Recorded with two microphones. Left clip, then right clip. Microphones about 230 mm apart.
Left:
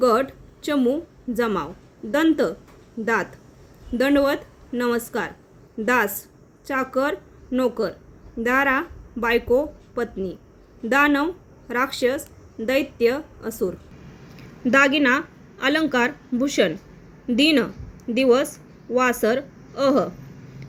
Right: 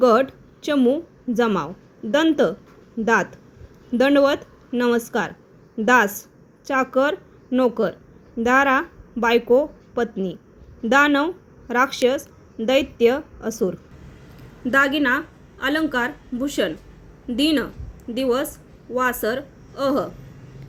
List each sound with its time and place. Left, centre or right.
0.0 s a woman's voice: centre
14.6 s a woman's voice: centre